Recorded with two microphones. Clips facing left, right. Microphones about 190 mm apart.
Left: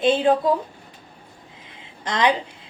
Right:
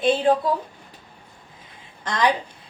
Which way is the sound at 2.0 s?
20° left (ahead or behind).